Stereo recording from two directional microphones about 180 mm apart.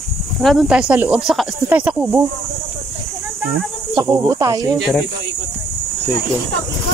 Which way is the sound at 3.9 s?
20° right (ahead or behind).